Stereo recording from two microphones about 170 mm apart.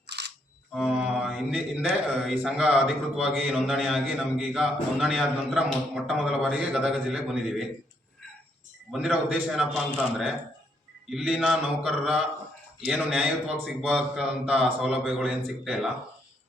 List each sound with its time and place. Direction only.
0.1 s camera: 80° right
0.7 s speech: centre (ahead or behind)
8.9 s speech: 5° right (ahead or behind)